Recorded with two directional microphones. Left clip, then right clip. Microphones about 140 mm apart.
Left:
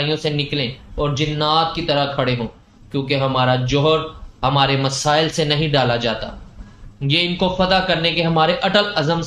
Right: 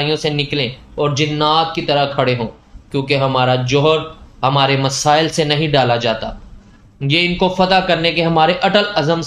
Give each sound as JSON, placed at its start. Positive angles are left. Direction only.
{"t": 0.0, "sound": "a man's voice", "side_deg": -40}